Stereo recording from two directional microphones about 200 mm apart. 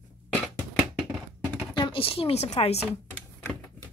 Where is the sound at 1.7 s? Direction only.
25° left (ahead or behind).